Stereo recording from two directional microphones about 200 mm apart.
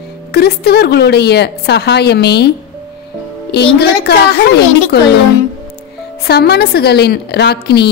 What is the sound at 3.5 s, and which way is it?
Speech, 55° left (ahead or behind).